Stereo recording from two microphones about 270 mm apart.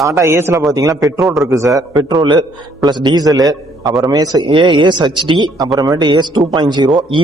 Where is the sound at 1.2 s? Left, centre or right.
Centre.